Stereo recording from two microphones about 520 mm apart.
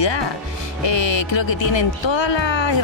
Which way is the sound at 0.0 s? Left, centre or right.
Left.